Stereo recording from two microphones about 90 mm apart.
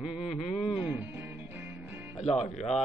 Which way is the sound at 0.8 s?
20° right (ahead or behind).